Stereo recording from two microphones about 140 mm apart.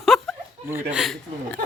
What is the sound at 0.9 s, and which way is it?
Speech, centre (ahead or behind).